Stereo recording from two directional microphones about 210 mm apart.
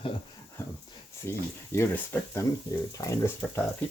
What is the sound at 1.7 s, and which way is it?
Speech, 10° left (ahead or behind).